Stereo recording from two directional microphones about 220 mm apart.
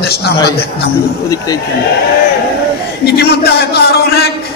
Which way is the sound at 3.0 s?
45° left (ahead or behind).